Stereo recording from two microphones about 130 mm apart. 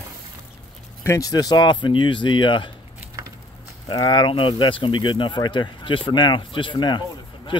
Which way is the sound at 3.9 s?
35° left (ahead or behind).